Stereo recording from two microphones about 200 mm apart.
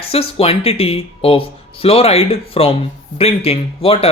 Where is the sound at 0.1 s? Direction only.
30° left (ahead or behind).